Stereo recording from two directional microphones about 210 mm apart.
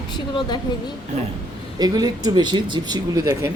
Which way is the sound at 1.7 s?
20° right (ahead or behind).